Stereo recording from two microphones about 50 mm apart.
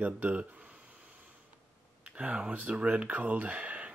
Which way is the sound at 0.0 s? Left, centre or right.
Right.